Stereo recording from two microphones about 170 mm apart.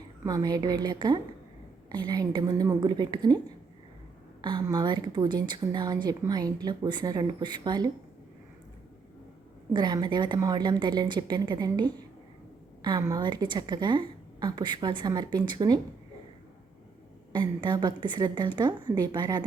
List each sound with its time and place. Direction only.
0.3 s a woman's voice: 20° right (ahead or behind)
9.7 s a woman's voice: 25° right (ahead or behind)
17.3 s a woman's voice: 25° right (ahead or behind)